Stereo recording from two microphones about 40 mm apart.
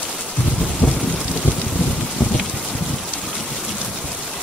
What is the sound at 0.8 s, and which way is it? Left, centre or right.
Thunder, left.